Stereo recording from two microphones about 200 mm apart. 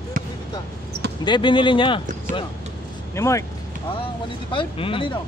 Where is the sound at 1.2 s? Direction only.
25° left (ahead or behind).